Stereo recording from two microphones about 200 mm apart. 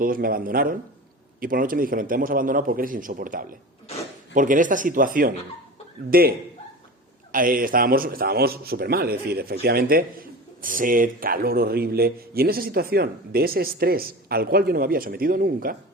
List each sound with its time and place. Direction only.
0.0 s a man's voice: 45° right (ahead or behind)
7.3 s a man's voice: 45° right (ahead or behind)